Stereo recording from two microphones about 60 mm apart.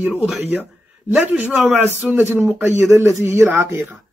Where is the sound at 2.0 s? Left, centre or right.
Centre.